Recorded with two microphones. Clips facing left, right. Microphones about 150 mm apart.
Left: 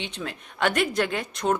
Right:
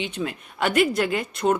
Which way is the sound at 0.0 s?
5° right (ahead or behind).